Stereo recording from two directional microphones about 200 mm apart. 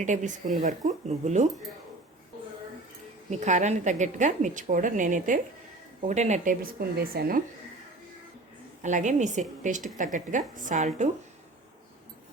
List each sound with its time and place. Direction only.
0.0 s a woman's voice: 40° right (ahead or behind)
3.2 s a woman's voice: 35° right (ahead or behind)
8.8 s a woman's voice: 40° right (ahead or behind)